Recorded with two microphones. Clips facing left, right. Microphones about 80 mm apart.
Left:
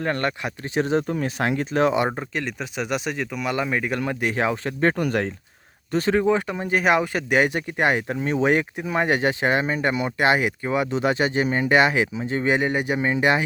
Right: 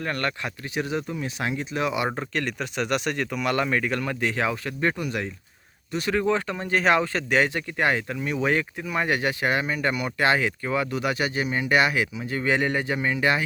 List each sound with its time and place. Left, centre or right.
0.0 s speech: left
0.7 s speech: left
1.1 s speech: left
2.0 s speech: centre; by 5.3 s left
5.9 s speech: left
6.1 s speech: centre